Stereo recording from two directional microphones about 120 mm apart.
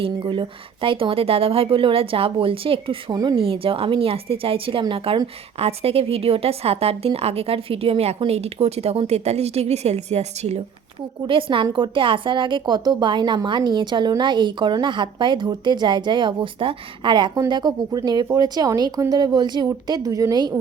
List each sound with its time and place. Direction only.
0.0 s a woman's voice: 45° right (ahead or behind); by 10.6 s 65° right (ahead or behind)
11.3 s a woman's voice: 45° right (ahead or behind)